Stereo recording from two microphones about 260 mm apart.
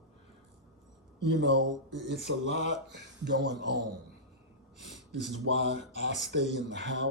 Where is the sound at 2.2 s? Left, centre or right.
Left.